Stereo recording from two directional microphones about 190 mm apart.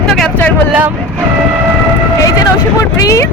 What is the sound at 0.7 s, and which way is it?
Speech, 10° right (ahead or behind).